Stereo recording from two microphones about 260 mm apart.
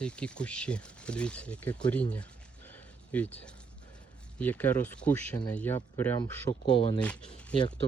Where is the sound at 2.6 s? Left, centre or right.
Centre.